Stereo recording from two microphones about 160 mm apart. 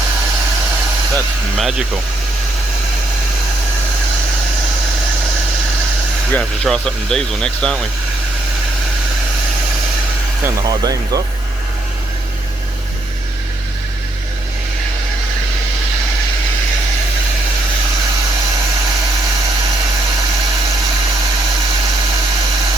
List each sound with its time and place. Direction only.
1.1 s speech: centre (ahead or behind)
6.3 s speech: 5° left (ahead or behind)
10.4 s speech: 25° right (ahead or behind)